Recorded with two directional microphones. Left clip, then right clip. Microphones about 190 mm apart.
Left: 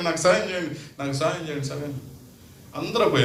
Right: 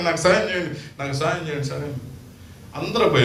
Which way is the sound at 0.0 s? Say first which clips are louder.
Right 2 dB; 35° left (ahead or behind).